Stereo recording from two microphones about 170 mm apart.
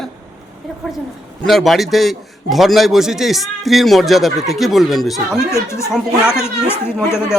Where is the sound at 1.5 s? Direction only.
Centre (ahead or behind).